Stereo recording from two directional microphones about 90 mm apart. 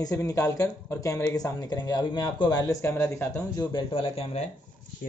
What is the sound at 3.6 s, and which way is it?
Speech, 60° left (ahead or behind).